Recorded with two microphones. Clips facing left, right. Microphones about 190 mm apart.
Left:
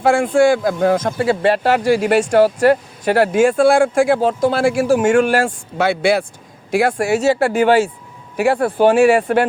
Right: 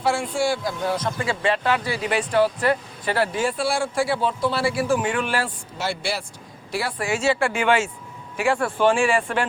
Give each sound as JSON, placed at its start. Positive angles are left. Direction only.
{"t": 0.0, "sound": "speech", "side_deg": 50}
{"t": 5.7, "sound": "speech", "side_deg": 60}